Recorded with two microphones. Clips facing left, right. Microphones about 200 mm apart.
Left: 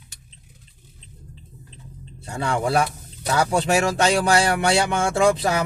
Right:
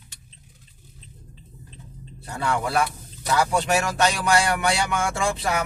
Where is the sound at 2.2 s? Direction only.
25° left (ahead or behind).